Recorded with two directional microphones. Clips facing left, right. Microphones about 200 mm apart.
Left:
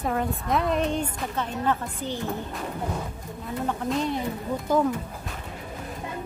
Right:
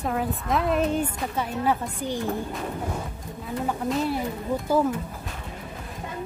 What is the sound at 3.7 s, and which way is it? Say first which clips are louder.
Speech: right 1 dB; 5° right (ahead or behind).